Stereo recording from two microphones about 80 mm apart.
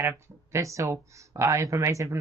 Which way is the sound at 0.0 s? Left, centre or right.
Right.